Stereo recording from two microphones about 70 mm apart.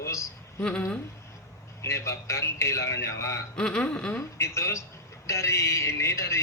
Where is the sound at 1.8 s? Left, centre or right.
Left.